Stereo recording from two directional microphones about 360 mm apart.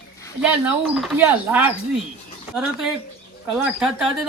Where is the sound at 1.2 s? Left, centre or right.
Centre.